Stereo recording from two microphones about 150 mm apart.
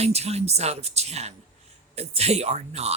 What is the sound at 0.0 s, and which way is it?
Speech, 45° right (ahead or behind).